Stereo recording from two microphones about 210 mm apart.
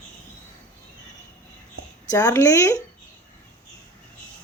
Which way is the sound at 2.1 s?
15° left (ahead or behind).